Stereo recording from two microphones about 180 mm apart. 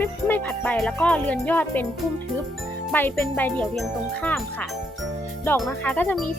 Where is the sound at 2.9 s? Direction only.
10° left (ahead or behind).